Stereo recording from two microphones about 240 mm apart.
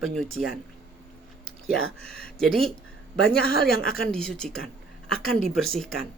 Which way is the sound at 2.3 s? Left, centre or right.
Centre.